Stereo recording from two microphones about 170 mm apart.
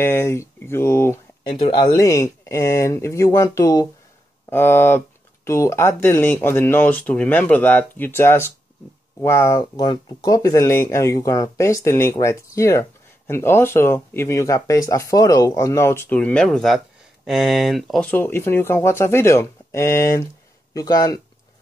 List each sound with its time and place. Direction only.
0.0 s speech: 15° left (ahead or behind)
1.6 s speech: 25° left (ahead or behind)